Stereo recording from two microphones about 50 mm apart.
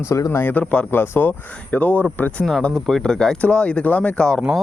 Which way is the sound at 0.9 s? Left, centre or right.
Left.